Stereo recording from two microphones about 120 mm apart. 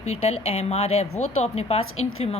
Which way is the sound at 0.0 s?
65° left (ahead or behind).